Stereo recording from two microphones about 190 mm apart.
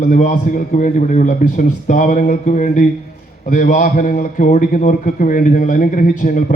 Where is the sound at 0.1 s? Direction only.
45° left (ahead or behind).